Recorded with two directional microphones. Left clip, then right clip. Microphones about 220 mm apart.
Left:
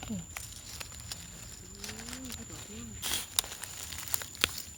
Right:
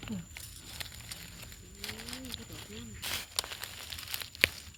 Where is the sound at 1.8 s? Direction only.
10° right (ahead or behind).